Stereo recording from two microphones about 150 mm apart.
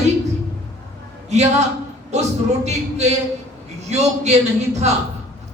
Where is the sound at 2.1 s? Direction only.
50° right (ahead or behind).